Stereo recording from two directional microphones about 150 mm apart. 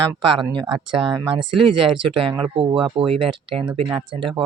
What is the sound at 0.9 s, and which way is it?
Speech, 30° right (ahead or behind).